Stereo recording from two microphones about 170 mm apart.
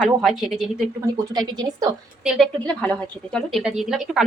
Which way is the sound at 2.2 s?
Centre (ahead or behind).